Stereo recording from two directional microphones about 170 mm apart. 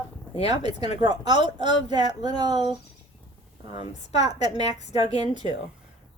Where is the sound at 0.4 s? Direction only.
25° right (ahead or behind).